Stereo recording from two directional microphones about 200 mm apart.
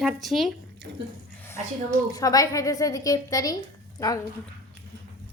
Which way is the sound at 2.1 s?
20° left (ahead or behind).